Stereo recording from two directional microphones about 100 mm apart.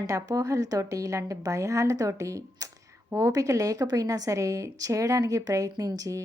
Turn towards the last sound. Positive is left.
turn(degrees=-35)  # may be behind; listen again after turning